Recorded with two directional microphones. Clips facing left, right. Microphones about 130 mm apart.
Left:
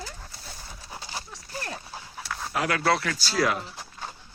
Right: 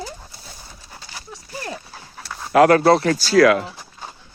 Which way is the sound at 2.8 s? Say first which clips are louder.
Right 10 dB; 35° right (ahead or behind).